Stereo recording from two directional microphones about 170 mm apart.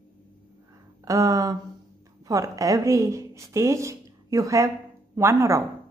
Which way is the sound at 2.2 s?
20° right (ahead or behind).